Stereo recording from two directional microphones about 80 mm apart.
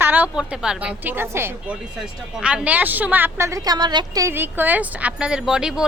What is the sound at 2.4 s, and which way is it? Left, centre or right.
Speech, centre.